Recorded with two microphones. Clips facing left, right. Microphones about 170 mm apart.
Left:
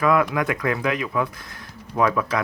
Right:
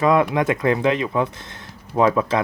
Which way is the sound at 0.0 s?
25° right (ahead or behind).